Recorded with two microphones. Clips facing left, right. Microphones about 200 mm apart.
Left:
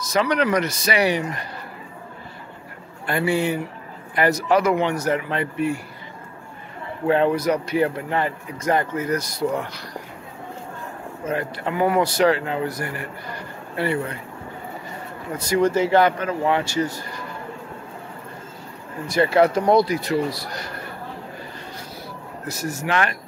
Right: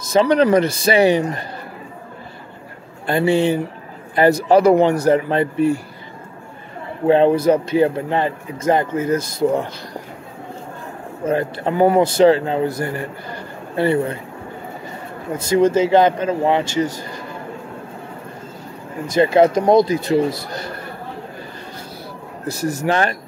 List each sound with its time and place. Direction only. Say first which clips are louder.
0.1 s speech: right 7 dB; 30° right (ahead or behind)
3.1 s a man's voice: right 5 dB; 25° right (ahead or behind)
7.1 s speech: right 6 dB; 25° right (ahead or behind)
11.2 s speech: right 6 dB; 30° right (ahead or behind)
15.3 s speech: right 4 dB; 25° right (ahead or behind)
19.0 s speech: right 4 dB; 20° right (ahead or behind)
22.5 s speech: right 5 dB; 35° right (ahead or behind)